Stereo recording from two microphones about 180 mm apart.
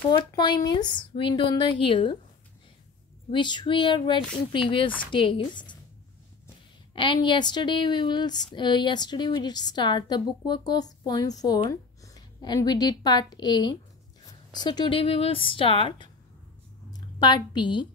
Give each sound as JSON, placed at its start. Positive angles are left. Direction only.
{"t": 0.2, "sound": "speech", "side_deg": 25}
{"t": 3.3, "sound": "speech", "side_deg": 25}
{"t": 7.0, "sound": "a woman's voice", "side_deg": 25}
{"t": 17.2, "sound": "speech", "side_deg": 25}